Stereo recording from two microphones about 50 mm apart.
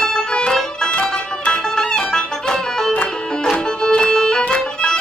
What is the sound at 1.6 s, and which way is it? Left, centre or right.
Music, centre.